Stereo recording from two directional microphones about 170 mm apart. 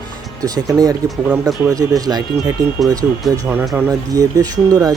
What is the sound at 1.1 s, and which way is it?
Speech, centre (ahead or behind).